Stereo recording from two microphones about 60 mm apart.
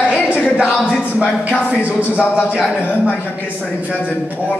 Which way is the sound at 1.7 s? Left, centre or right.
Right.